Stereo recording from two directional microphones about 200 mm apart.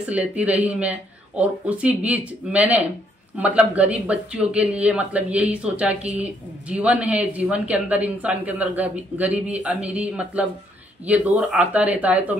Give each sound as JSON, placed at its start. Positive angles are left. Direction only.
{"t": 0.0, "sound": "speech", "side_deg": -5}